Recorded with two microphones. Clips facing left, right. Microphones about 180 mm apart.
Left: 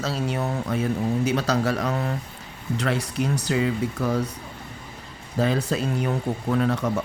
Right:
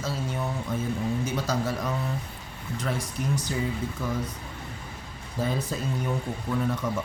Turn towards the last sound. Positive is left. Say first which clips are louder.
# left 5 dB
turn(degrees=70)  # may be behind; listen again after turning